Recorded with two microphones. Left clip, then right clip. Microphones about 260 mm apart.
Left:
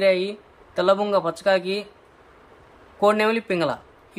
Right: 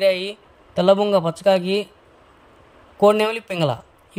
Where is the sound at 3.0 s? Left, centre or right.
Right.